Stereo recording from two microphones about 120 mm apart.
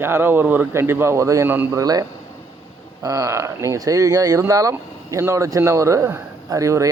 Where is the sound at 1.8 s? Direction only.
30° right (ahead or behind).